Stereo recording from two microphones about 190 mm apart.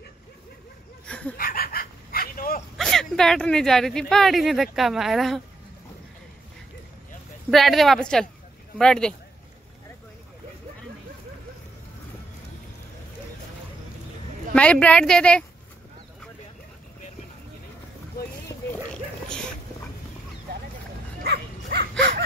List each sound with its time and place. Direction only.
1.0 s a sound: 5° left (ahead or behind)
1.4 s chicken: 50° left (ahead or behind)
2.8 s speech: centre (ahead or behind)
7.5 s speech: centre (ahead or behind)
14.5 s speech: 5° left (ahead or behind)
21.2 s dog: 55° right (ahead or behind)